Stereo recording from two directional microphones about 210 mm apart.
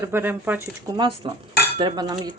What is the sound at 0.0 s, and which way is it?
Speech, 10° right (ahead or behind).